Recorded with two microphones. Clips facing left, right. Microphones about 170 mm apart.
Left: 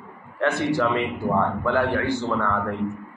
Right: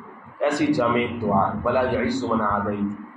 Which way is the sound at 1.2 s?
25° right (ahead or behind).